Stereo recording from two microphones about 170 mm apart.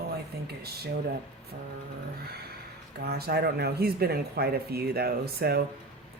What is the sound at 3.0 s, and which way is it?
Speech, 70° right (ahead or behind).